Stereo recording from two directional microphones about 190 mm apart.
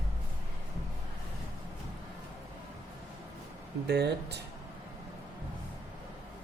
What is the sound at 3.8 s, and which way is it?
Speech, 60° right (ahead or behind).